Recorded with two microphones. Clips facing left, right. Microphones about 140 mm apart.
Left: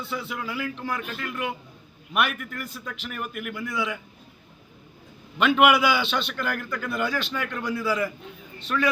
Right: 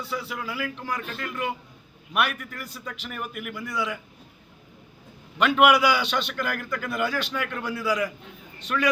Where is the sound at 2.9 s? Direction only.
Centre (ahead or behind).